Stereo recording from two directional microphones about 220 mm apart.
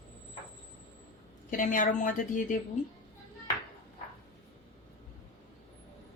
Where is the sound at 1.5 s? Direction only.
35° left (ahead or behind).